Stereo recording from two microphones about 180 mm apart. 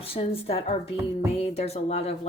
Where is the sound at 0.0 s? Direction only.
30° left (ahead or behind).